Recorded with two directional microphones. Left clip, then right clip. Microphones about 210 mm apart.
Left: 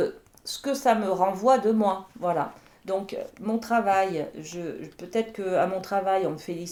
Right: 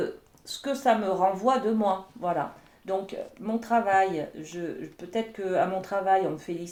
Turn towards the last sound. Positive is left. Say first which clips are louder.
# right 1 dB
turn(degrees=35)  # may be behind; listen again after turning